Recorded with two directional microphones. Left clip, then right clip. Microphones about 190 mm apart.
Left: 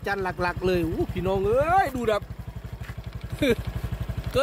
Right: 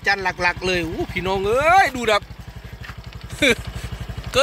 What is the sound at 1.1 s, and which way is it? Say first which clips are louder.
Speech: right 4 dB; 10° left (ahead or behind).